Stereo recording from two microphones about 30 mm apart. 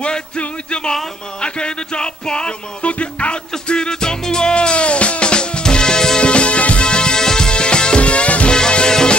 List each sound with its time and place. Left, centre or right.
0.4 s music: left
2.8 s music: left
3.6 s music: left
4.6 s music: left
6.2 s music: left
8.5 s music: left